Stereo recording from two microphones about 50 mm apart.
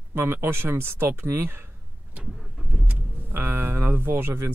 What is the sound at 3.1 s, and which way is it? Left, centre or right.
Speech, right.